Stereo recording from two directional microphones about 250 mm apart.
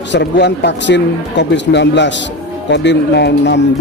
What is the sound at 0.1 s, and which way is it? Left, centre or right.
A man's voice, left.